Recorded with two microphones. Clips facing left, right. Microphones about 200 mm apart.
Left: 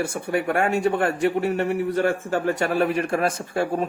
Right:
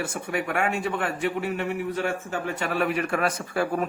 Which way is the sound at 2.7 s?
30° left (ahead or behind).